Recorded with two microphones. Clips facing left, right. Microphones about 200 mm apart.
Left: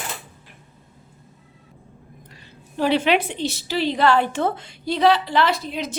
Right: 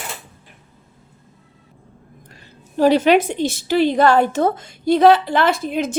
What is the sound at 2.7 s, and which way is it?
A woman's voice, 40° right (ahead or behind).